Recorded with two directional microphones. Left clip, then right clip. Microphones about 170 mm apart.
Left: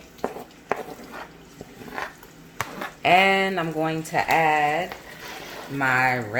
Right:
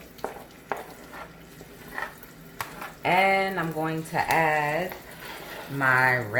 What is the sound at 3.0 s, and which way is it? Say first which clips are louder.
Speech: left 4 dB; 55° left (ahead or behind).